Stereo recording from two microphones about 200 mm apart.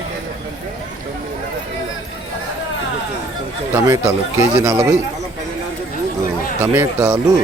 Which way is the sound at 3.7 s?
15° right (ahead or behind).